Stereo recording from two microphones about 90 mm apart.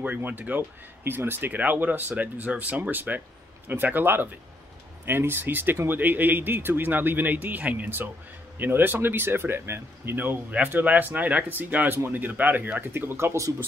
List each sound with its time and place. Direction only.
0.0 s speech: 20° right (ahead or behind)